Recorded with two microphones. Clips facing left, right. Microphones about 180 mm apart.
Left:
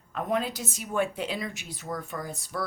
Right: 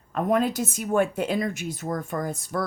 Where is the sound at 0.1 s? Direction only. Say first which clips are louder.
Right 6 dB; 50° right (ahead or behind).